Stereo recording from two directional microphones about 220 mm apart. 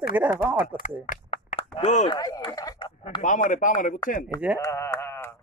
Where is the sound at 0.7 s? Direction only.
35° left (ahead or behind).